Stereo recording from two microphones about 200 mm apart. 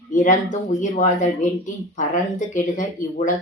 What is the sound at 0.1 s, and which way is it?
Speech, 40° left (ahead or behind).